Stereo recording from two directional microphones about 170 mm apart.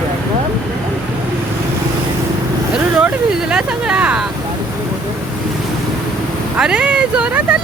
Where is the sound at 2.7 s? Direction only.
5° right (ahead or behind).